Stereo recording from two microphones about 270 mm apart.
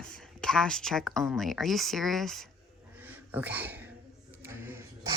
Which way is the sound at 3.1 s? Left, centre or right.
Centre.